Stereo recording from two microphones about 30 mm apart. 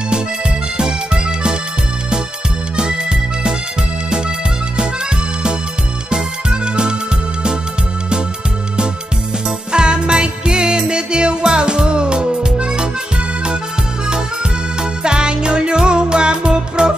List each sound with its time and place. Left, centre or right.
0.7 s music: right
2.7 s music: right
6.0 s music: right
9.7 s music: right
14.8 s music: right